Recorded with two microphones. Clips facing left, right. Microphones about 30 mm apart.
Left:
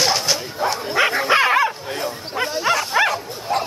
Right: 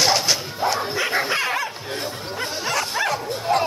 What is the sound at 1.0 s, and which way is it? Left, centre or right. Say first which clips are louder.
Dog: left 9 dB; left.